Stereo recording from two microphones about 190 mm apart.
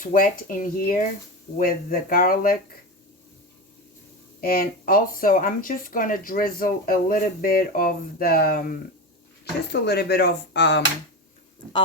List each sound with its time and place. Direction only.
0.0 s speech: 45° left (ahead or behind)
4.4 s speech: 50° left (ahead or behind)
9.4 s speech: 60° left (ahead or behind)